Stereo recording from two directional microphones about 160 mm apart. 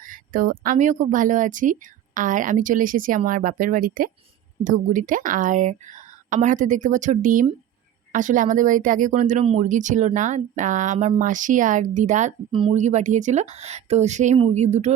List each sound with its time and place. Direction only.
0.1 s a woman's voice: 60° right (ahead or behind)
12.5 s speech: 30° right (ahead or behind)
12.7 s a woman's voice: 45° right (ahead or behind)